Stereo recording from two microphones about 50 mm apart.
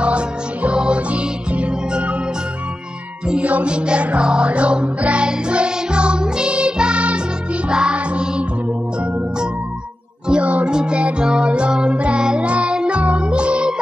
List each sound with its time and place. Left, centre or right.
0.0 s music: right
3.4 s music: right
10.2 s music: right